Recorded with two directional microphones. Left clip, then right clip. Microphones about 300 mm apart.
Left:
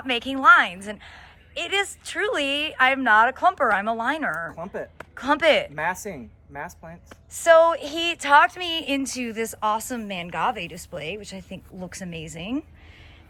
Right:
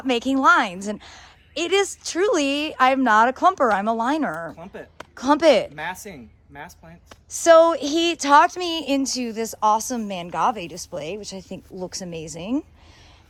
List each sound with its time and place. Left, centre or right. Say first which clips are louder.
0.0 s a woman's voice: right 1 dB; centre
4.5 s speech: left 6 dB; centre
4.9 s speech: right 3 dB; centre
5.7 s speech: left 4 dB; centre
7.1 s a woman's voice: right 2 dB; right